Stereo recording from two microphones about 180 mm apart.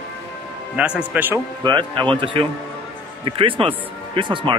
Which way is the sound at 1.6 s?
25° right (ahead or behind).